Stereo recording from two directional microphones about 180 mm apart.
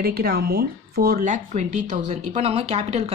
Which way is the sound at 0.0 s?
60° right (ahead or behind).